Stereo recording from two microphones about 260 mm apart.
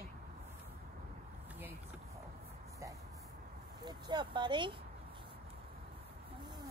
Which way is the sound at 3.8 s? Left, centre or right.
Centre.